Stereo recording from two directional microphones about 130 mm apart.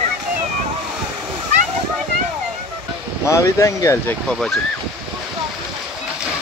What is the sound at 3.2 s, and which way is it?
Speech, 25° left (ahead or behind).